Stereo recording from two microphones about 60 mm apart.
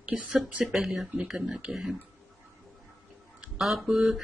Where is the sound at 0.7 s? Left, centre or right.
Centre.